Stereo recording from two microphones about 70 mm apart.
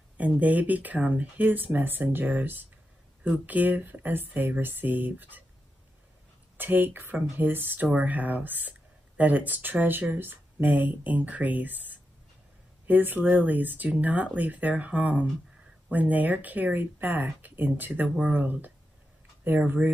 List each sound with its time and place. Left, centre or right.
0.2 s speech: right
6.6 s speech: right